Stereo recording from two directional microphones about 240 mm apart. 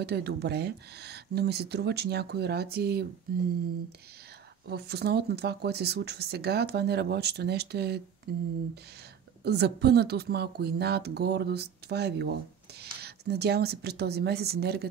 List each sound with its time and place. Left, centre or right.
0.0 s speech: right
4.6 s speech: right
8.3 s a sound: right
9.4 s speech: right